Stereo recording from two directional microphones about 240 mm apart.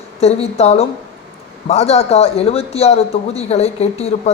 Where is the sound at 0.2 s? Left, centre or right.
Left.